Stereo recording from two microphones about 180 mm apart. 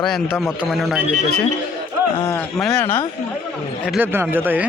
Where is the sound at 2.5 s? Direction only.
5° left (ahead or behind).